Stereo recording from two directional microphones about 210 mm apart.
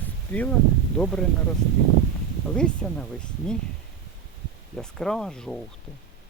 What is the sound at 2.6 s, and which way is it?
Speech, 5° left (ahead or behind).